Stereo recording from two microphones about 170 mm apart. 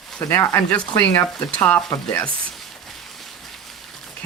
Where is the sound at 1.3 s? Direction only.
5° left (ahead or behind).